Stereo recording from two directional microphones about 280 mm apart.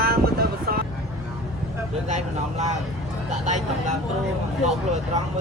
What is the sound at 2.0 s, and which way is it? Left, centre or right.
Speech, right.